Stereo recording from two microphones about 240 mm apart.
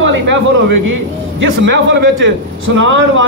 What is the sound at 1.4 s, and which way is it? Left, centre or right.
A man's voice, right.